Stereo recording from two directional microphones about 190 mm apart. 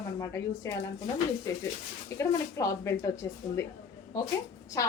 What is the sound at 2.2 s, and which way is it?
A woman's voice, 15° left (ahead or behind).